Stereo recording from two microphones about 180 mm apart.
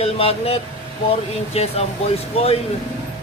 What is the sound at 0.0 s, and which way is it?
A man's voice, 35° left (ahead or behind).